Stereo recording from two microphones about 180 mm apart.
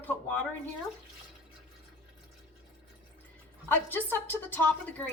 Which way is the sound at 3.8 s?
10° left (ahead or behind).